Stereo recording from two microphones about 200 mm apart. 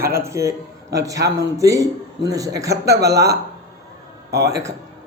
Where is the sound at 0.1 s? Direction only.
15° right (ahead or behind).